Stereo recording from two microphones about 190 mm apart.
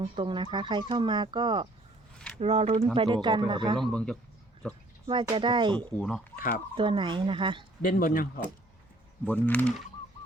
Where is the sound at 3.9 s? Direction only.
5° left (ahead or behind).